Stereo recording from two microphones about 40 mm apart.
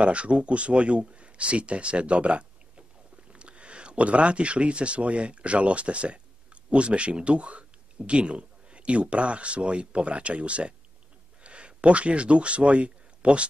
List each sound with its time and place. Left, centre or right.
0.0 s speech: right